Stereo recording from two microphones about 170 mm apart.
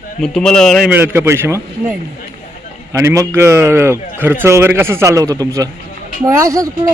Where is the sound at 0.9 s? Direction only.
15° right (ahead or behind).